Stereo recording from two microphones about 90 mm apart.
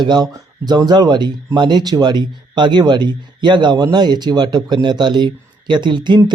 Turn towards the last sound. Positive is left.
turn(degrees=-55)  # may be behind; listen again after turning